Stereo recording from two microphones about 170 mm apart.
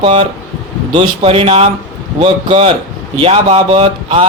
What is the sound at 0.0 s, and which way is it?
Speech, 35° right (ahead or behind).